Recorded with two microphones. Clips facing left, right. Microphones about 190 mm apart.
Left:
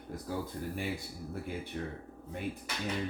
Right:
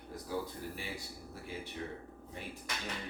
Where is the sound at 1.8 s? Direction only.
50° left (ahead or behind).